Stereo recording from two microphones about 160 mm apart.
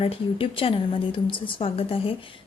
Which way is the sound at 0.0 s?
35° left (ahead or behind).